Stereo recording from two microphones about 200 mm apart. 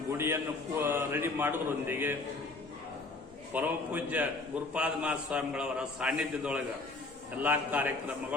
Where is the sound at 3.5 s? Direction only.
10° right (ahead or behind).